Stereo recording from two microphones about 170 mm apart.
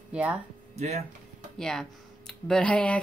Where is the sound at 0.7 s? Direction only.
40° right (ahead or behind).